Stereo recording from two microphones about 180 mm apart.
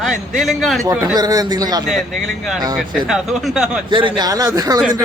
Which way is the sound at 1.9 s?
Centre (ahead or behind).